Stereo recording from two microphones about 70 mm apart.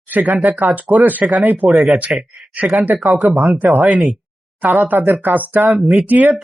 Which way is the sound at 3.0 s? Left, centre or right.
Centre.